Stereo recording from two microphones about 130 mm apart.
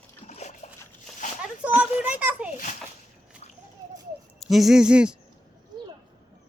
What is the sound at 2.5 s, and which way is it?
Speech, 75° left (ahead or behind).